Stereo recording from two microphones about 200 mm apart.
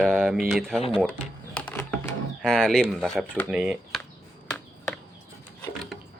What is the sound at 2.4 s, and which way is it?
Speech, 5° left (ahead or behind).